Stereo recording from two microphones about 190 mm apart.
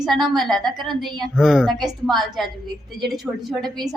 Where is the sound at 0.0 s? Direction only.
Centre (ahead or behind).